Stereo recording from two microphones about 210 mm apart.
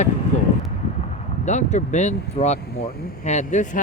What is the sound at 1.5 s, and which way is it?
Speech, 35° left (ahead or behind).